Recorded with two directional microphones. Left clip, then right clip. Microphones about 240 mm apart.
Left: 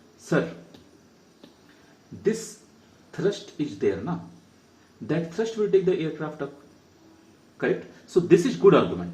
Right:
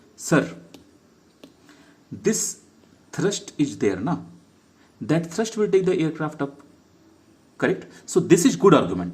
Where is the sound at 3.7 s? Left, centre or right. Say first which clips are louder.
Left 2 dB; right.